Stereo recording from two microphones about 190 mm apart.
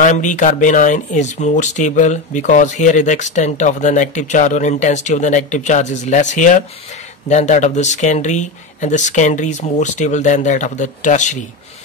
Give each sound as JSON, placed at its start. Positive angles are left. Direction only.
{"t": 0.0, "sound": "speech", "side_deg": 40}